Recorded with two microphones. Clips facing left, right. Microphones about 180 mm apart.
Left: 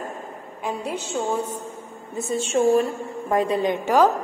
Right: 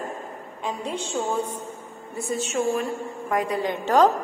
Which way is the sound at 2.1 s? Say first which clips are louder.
Left 4 dB; 25° left (ahead or behind).